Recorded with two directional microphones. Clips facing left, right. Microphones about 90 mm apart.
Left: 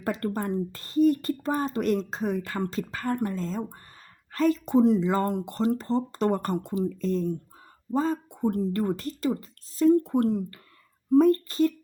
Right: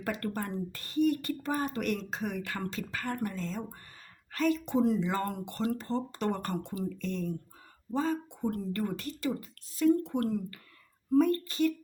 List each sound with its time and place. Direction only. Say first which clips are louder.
0.0 s a woman's voice: left 5 dB; 30° left (ahead or behind)
11.1 s speech: left 6 dB; 35° left (ahead or behind)